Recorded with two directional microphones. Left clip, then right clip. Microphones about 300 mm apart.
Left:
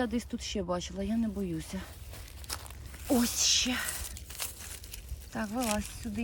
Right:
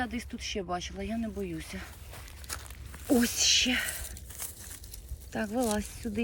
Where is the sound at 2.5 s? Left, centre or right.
Centre.